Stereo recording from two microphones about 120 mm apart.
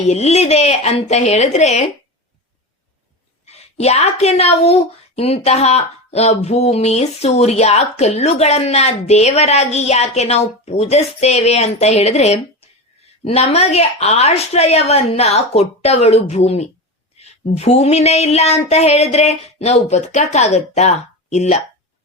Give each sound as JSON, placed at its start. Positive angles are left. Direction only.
{"t": 0.0, "sound": "a woman's voice", "side_deg": 65}
{"t": 3.4, "sound": "a woman's voice", "side_deg": 65}